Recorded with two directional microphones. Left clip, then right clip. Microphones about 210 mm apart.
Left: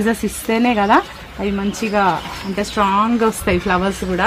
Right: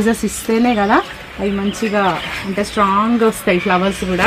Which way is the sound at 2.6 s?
10° right (ahead or behind).